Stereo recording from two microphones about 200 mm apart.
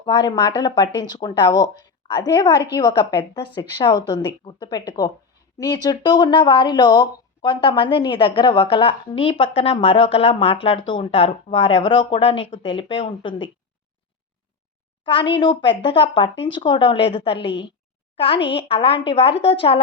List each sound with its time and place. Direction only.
0.0 s speech: 20° left (ahead or behind)
15.0 s speech: 25° left (ahead or behind)
17.3 s a woman's voice: 60° left (ahead or behind)
18.4 s speech: 25° left (ahead or behind)